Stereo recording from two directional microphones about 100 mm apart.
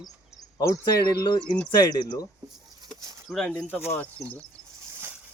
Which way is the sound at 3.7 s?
20° left (ahead or behind).